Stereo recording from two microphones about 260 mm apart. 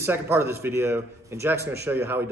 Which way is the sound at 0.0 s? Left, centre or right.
Centre.